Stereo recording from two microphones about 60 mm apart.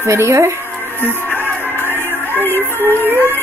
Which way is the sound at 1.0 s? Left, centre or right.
Left.